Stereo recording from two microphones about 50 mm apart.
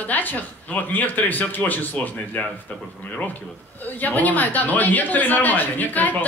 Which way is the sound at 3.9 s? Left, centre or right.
Left.